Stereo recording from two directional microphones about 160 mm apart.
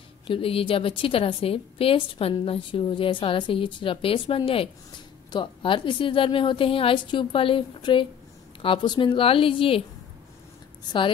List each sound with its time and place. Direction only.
0.3 s a woman's voice: 35° left (ahead or behind)